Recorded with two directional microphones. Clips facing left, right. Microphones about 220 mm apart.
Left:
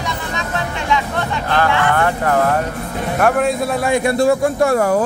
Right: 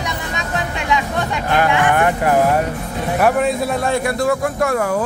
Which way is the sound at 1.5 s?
15° right (ahead or behind).